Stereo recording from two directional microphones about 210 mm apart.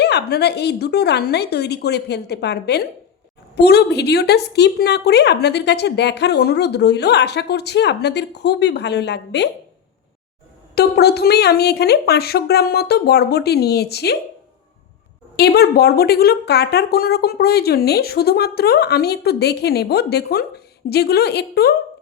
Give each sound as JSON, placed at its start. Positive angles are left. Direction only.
{"t": 0.0, "sound": "a woman's voice", "side_deg": 50}
{"t": 10.8, "sound": "a woman's voice", "side_deg": 50}
{"t": 15.4, "sound": "a woman's voice", "side_deg": 50}